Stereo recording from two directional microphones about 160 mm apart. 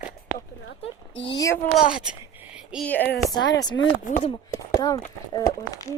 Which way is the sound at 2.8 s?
10° left (ahead or behind).